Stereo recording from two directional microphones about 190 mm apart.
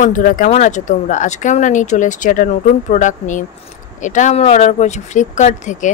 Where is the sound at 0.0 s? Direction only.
45° left (ahead or behind).